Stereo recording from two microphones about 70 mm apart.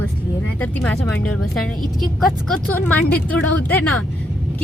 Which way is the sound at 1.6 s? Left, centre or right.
Centre.